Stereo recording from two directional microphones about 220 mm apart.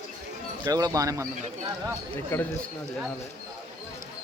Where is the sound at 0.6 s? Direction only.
15° right (ahead or behind).